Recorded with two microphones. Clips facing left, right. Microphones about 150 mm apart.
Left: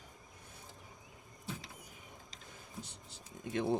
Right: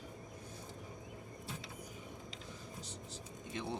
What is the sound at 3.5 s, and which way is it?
Speech, 50° left (ahead or behind).